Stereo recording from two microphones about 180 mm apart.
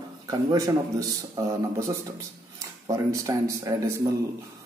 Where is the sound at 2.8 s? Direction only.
20° right (ahead or behind).